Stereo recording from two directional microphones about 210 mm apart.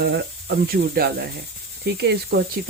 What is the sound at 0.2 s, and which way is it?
Speech, 50° right (ahead or behind).